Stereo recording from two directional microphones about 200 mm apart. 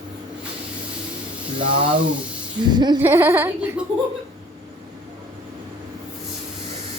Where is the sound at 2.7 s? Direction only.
20° right (ahead or behind).